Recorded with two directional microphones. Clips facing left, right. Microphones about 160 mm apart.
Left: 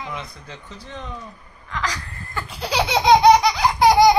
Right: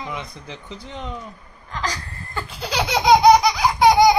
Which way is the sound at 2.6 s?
5° left (ahead or behind).